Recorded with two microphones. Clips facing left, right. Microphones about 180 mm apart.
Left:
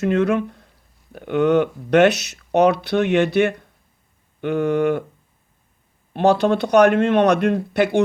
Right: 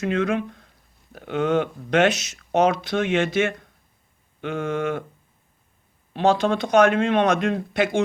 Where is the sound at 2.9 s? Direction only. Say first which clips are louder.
Left 4 dB; 40° left (ahead or behind).